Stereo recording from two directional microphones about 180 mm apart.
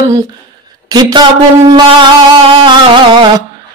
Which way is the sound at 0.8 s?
25° right (ahead or behind).